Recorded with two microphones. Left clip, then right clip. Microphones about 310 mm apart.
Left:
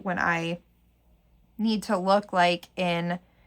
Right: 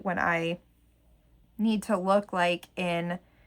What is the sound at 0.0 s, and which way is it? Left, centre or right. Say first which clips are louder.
Speech: left 1 dB; centre.